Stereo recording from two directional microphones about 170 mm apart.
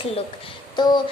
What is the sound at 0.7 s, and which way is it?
Child singing, 25° left (ahead or behind).